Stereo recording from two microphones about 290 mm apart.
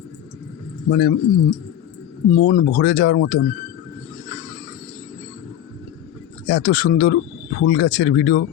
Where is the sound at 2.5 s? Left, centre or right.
Left.